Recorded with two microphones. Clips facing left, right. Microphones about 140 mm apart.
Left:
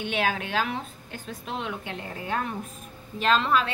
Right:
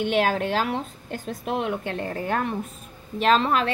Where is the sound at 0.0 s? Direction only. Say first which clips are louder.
Right 6 dB; 40° right (ahead or behind).